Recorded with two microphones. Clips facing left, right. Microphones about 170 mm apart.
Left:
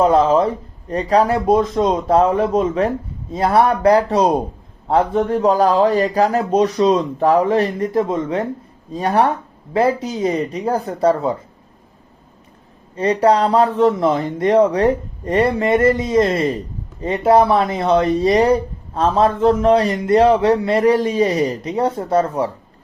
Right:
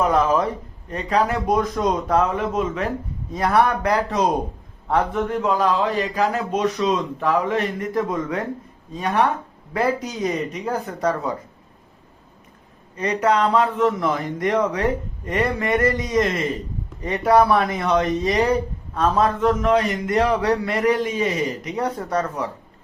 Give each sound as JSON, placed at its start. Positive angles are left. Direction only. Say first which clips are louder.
{"t": 0.0, "sound": "speech", "louder": "left 5 dB", "side_deg": 25}
{"t": 8.9, "sound": "speech", "louder": "left 4 dB", "side_deg": 35}
{"t": 13.0, "sound": "speech", "louder": "left 5 dB", "side_deg": 35}